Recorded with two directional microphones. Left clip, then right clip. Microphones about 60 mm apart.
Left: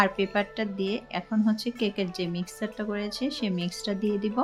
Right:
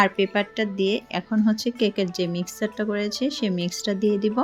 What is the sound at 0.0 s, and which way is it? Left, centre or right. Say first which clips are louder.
Speech: right 4 dB; right.